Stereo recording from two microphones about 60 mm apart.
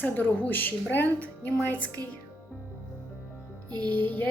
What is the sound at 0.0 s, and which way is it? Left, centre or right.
A woman's voice, left.